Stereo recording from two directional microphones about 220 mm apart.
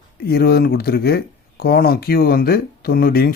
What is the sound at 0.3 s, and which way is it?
Speech, 45° left (ahead or behind).